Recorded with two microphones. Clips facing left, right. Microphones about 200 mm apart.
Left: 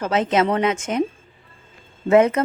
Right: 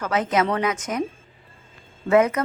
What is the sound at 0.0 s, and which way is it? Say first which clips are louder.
A woman's voice: left 3 dB; 25° left (ahead or behind).